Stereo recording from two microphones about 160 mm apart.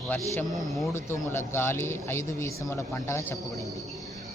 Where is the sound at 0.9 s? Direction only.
15° left (ahead or behind).